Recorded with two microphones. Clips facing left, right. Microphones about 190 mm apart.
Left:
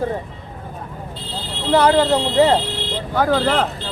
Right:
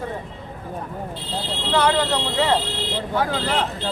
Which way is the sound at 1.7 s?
40° left (ahead or behind).